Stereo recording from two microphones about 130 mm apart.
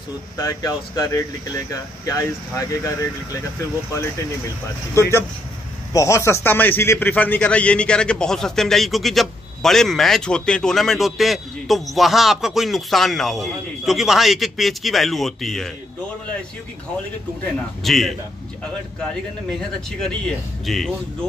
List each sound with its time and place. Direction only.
0.4 s speech: 25° left (ahead or behind)
5.9 s a man's voice: 25° left (ahead or behind); by 15.7 s 5° left (ahead or behind)
17.8 s a man's voice: centre (ahead or behind)
20.0 s a man's voice: 5° left (ahead or behind)